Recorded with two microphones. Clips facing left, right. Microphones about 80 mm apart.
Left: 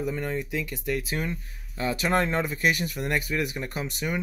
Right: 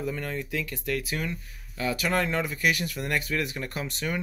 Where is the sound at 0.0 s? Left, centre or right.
Centre.